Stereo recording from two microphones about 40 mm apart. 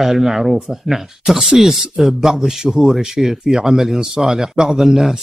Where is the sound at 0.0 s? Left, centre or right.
Centre.